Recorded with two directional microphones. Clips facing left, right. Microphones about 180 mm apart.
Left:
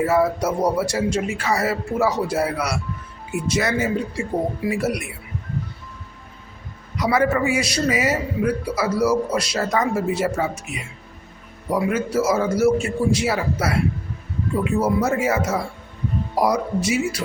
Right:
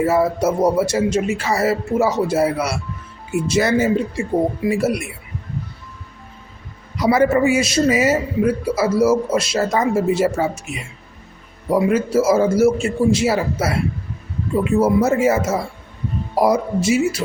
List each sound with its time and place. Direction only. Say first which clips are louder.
0.0 s a man's voice: right 2 dB; 25° right (ahead or behind)
6.9 s a man's voice: right 4 dB; 30° right (ahead or behind)
11.7 s a man's voice: right 5 dB; 30° right (ahead or behind)
14.8 s a man's voice: right 6 dB; 25° right (ahead or behind)